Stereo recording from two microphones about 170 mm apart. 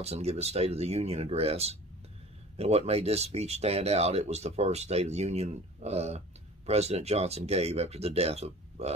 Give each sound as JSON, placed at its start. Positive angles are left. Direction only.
{"t": 0.0, "sound": "speech", "side_deg": -40}